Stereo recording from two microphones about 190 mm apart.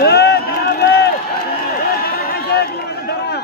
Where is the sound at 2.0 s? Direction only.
55° left (ahead or behind).